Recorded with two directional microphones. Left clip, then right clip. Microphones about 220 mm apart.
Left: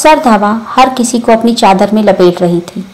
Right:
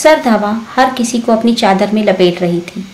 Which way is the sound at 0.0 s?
15° left (ahead or behind).